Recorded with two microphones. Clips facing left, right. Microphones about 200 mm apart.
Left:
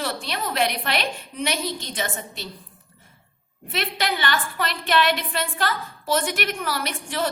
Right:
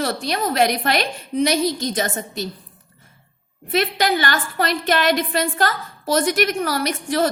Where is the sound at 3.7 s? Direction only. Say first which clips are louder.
Right 7 dB; 40° right (ahead or behind).